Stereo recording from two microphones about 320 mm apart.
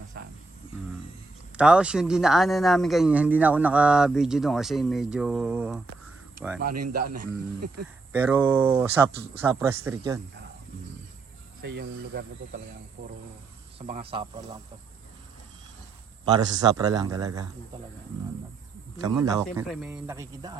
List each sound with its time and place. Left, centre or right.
0.1 s a sound: right
1.5 s a man's voice: centre
6.7 s speech: right
8.1 s speech: centre
11.6 s speech: right
13.7 s speech: centre
16.7 s speech: centre
19.0 s speech: centre